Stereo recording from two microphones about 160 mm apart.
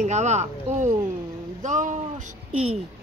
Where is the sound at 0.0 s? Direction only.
50° right (ahead or behind).